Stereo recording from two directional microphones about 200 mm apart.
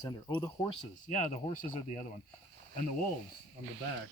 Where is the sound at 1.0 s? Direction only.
40° left (ahead or behind).